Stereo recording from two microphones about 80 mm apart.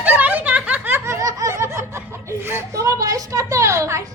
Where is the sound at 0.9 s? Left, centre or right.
Right.